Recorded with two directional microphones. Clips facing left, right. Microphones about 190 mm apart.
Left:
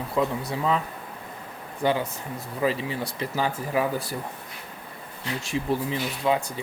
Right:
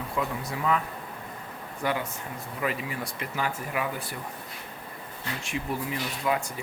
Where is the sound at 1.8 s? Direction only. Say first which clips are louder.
Left 5 dB; 30° left (ahead or behind).